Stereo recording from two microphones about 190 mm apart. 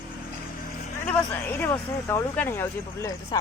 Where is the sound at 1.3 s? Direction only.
10° left (ahead or behind).